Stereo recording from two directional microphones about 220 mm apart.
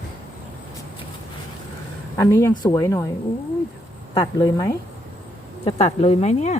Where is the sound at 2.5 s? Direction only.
15° left (ahead or behind).